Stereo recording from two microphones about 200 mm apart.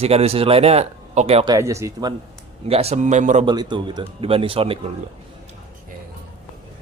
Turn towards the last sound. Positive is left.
turn(degrees=-30)  # may be behind; listen again after turning